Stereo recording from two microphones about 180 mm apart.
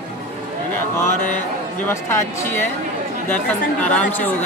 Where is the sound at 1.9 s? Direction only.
15° left (ahead or behind).